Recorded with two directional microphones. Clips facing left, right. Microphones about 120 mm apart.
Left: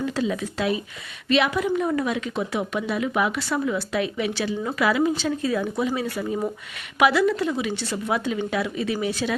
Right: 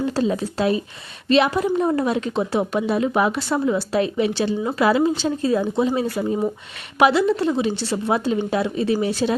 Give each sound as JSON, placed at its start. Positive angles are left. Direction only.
{"t": 0.0, "sound": "a woman's voice", "side_deg": -35}